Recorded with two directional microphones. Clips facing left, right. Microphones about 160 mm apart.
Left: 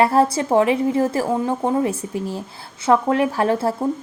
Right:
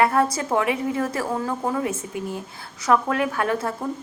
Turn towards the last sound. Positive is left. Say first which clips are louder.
# left 5 dB
turn(degrees=30)  # may be behind; listen again after turning